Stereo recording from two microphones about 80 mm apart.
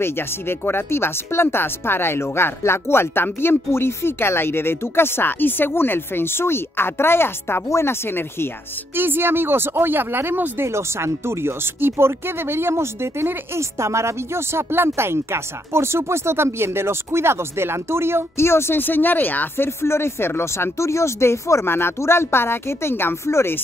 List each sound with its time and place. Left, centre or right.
0.0 s speech: left
8.9 s speech: right
18.4 s speech: left